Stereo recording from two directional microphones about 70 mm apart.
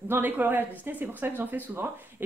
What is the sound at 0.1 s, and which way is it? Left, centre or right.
Speech, right.